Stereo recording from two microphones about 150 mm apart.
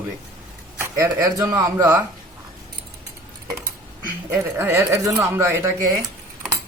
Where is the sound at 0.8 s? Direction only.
20° right (ahead or behind).